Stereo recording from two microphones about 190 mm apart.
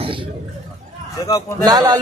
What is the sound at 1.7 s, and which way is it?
Speech, 20° right (ahead or behind).